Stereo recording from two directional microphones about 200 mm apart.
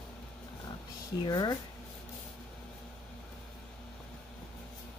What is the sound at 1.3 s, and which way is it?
Speech, 20° left (ahead or behind).